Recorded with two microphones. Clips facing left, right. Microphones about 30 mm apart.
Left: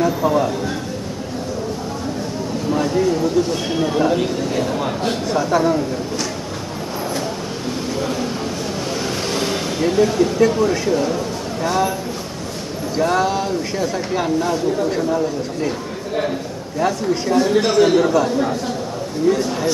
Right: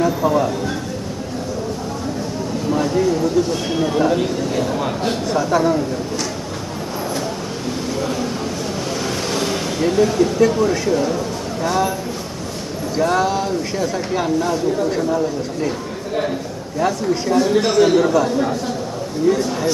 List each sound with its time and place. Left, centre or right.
0.0 s speech: centre
2.7 s speech: centre
8.0 s a sound: centre
9.0 s speech: centre
12.9 s speech: centre
16.8 s speech: centre